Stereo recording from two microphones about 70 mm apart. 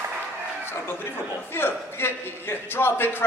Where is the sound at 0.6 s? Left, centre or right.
Left.